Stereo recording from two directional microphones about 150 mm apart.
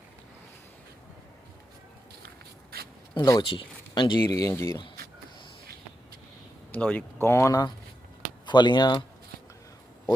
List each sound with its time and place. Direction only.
2.7 s a sound: 80° right
3.2 s speech: 25° left (ahead or behind)
3.5 s speech: 35° left (ahead or behind); by 4.8 s 20° left (ahead or behind)
6.7 s speech: 10° left (ahead or behind); by 9.0 s 30° left (ahead or behind)